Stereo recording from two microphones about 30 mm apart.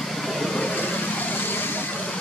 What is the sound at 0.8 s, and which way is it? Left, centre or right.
Vehicle, left.